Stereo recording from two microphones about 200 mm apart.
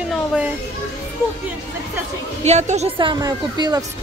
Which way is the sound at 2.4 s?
35° right (ahead or behind).